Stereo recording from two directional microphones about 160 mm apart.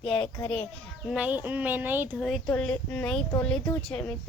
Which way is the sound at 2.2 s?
Centre (ahead or behind).